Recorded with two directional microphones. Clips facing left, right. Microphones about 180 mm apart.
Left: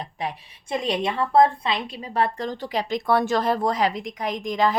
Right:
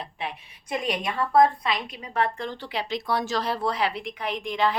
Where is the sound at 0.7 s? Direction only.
25° left (ahead or behind).